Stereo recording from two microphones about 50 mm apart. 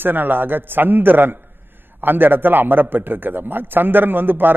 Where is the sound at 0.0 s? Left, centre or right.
Right.